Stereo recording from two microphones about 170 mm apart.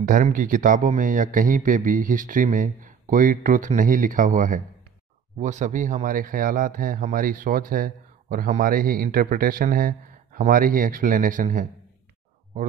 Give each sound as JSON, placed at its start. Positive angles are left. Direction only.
{"t": 0.0, "sound": "speech", "side_deg": -50}